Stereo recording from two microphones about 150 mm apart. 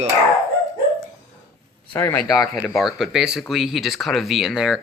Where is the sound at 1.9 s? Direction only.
15° left (ahead or behind).